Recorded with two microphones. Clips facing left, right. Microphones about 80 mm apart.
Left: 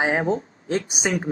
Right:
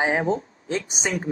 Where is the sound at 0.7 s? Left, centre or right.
Left.